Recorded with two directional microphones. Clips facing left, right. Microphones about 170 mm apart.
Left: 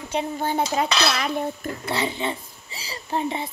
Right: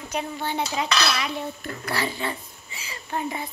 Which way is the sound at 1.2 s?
50° left (ahead or behind).